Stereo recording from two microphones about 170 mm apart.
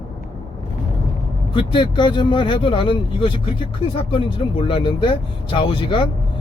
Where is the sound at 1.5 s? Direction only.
30° left (ahead or behind).